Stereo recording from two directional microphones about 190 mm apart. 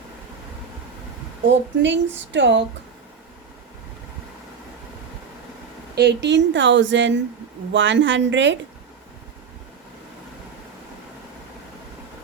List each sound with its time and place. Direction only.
1.5 s a woman's voice: 70° right (ahead or behind)
5.9 s a woman's voice: 60° right (ahead or behind)